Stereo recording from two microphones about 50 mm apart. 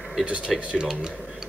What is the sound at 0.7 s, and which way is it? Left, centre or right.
Speech, centre.